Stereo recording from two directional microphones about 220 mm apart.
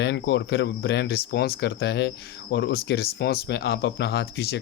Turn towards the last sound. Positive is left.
turn(degrees=50)  # may be behind; listen again after turning